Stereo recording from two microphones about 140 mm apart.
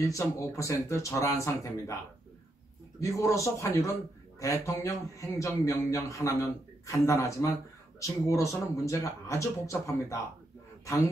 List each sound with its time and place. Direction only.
0.0 s a man's voice: 20° left (ahead or behind)
3.0 s a man's voice: 20° left (ahead or behind)